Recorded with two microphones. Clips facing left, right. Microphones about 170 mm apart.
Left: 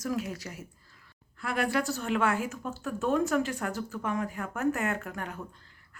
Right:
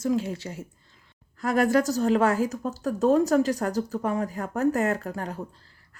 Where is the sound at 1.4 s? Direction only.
45° right (ahead or behind).